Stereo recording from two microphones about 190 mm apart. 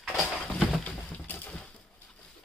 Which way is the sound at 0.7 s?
10° left (ahead or behind).